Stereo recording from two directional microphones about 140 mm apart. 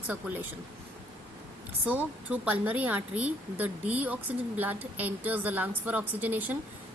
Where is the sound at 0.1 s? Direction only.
10° right (ahead or behind).